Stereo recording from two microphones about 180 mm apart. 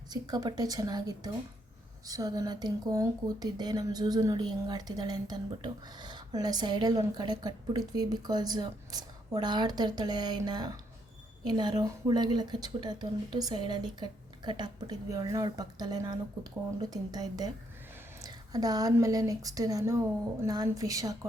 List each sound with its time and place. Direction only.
0.1 s speech: 20° right (ahead or behind)